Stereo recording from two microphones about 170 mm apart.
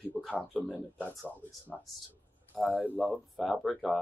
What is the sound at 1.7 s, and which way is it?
Speech, 5° left (ahead or behind).